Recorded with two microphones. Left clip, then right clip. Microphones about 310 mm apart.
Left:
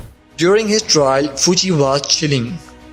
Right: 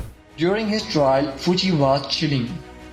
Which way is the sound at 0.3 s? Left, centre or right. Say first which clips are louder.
Left 8 dB; left.